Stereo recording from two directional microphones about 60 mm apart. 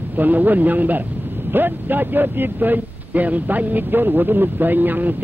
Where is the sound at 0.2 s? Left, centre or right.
Right.